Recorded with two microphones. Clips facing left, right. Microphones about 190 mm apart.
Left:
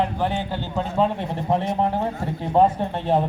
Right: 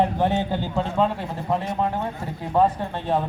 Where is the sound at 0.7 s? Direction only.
5° left (ahead or behind).